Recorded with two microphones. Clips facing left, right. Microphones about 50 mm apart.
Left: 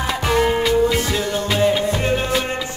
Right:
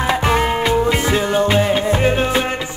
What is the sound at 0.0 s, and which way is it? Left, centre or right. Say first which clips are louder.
Music: right 2 dB; right.